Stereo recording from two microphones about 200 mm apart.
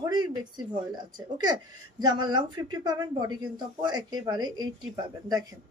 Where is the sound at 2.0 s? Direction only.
20° right (ahead or behind).